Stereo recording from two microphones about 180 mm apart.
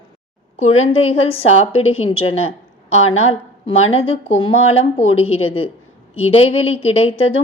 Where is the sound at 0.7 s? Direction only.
35° left (ahead or behind).